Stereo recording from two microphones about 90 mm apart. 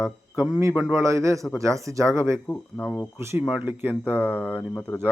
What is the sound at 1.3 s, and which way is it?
Speech, centre (ahead or behind).